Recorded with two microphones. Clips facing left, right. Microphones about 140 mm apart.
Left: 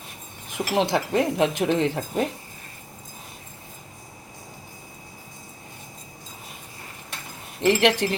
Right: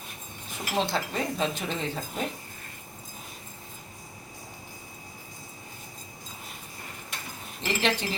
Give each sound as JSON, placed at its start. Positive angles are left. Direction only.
{"t": 0.5, "sound": "speech", "side_deg": 85}
{"t": 7.6, "sound": "speech", "side_deg": 70}